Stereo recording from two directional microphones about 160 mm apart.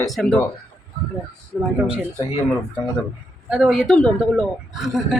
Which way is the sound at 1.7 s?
5° right (ahead or behind).